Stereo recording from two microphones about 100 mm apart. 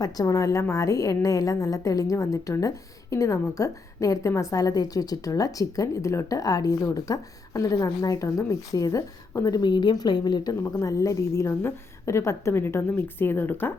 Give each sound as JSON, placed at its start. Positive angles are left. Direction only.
{"t": 0.0, "sound": "a woman's voice", "side_deg": 35}
{"t": 10.6, "sound": "a woman's voice", "side_deg": 30}